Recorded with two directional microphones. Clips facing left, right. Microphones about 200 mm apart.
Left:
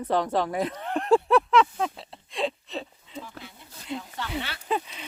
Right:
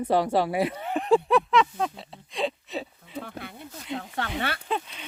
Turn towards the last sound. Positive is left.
turn(degrees=5)  # may be behind; listen again after turning